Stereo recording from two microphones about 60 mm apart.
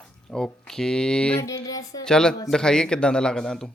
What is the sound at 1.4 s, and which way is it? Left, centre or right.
Music, left.